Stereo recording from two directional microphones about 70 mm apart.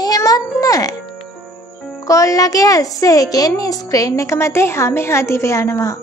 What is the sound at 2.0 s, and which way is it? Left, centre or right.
A woman's voice, left.